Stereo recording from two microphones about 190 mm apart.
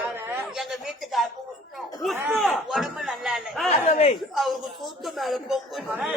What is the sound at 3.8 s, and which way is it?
Speech, 35° left (ahead or behind).